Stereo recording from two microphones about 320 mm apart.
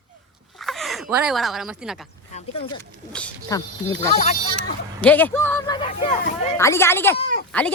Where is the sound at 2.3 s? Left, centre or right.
Centre.